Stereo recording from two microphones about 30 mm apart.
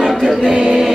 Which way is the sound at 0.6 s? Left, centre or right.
Right.